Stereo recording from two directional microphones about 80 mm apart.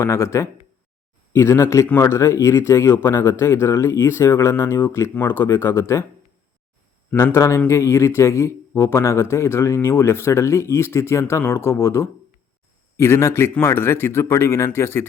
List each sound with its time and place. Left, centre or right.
0.0 s speech: left
7.3 s speech: left